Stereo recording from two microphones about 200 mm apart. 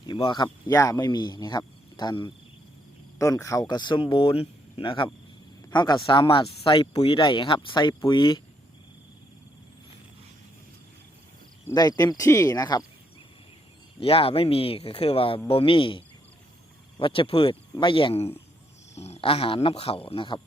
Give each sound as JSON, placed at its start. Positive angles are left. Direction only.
{"t": 0.0, "sound": "speech", "side_deg": 25}
{"t": 11.6, "sound": "speech", "side_deg": 20}
{"t": 14.0, "sound": "speech", "side_deg": 30}